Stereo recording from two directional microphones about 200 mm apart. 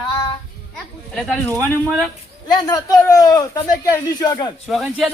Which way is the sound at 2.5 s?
20° left (ahead or behind).